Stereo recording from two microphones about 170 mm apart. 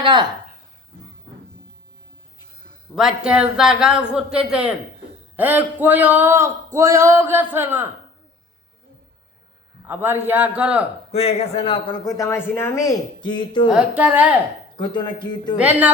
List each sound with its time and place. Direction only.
0.0 s a woman's voice: 25° right (ahead or behind)
2.9 s speech: centre (ahead or behind)
9.8 s speech: 10° right (ahead or behind)
11.1 s a man's voice: 35° left (ahead or behind)
12.0 s speech: 20° left (ahead or behind)
13.7 s speech: 5° right (ahead or behind)
14.8 s speech: 25° left (ahead or behind)
15.5 s speech: 10° right (ahead or behind)